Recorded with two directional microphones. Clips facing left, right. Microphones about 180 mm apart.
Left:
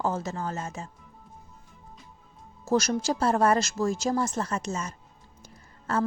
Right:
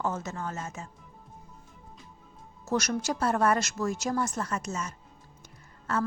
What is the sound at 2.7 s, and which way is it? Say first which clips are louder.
A woman's voice: left 4 dB; 30° left (ahead or behind).